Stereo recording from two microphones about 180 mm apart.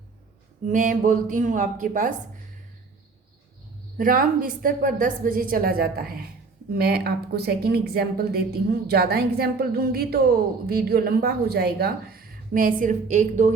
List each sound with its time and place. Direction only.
0.7 s a woman's voice: 45° right (ahead or behind)
3.9 s a woman's voice: 50° right (ahead or behind)